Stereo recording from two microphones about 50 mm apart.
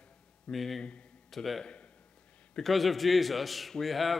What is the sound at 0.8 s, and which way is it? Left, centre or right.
Speech, left.